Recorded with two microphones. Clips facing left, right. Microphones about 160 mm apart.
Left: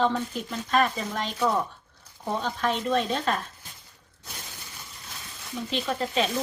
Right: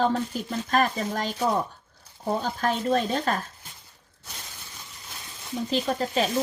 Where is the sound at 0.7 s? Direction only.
40° right (ahead or behind).